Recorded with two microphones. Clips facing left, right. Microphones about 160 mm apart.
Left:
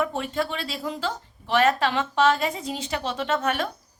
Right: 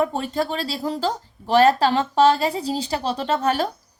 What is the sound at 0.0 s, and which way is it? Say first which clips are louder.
Speech: right 4 dB; 35° right (ahead or behind).